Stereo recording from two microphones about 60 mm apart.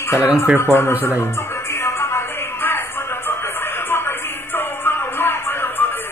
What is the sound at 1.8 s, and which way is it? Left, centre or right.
Music, left.